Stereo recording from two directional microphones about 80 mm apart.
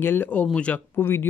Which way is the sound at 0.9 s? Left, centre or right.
Left.